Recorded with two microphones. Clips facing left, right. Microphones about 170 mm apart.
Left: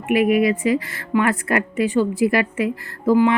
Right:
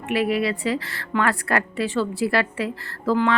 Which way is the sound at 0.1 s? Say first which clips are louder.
Left 6 dB; 15° left (ahead or behind).